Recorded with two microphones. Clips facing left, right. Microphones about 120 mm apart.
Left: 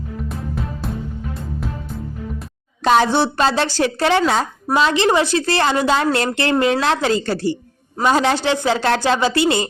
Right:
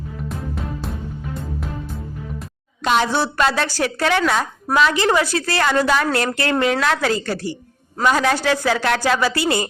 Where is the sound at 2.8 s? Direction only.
30° left (ahead or behind).